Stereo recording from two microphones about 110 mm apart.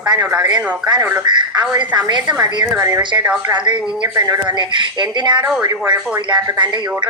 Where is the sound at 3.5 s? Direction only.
45° right (ahead or behind).